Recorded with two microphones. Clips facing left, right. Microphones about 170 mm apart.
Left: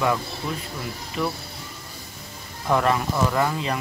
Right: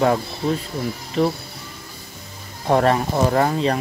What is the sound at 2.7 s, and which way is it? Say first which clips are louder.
Speech: right 4 dB; 40° right (ahead or behind).